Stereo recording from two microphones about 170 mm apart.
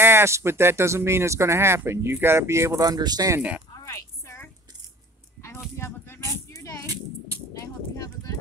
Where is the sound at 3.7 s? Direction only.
15° left (ahead or behind).